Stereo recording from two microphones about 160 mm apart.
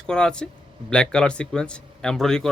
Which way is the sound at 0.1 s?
5° left (ahead or behind).